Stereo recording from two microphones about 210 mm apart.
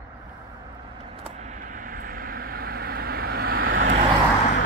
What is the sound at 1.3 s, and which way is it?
Vehicle, 35° right (ahead or behind).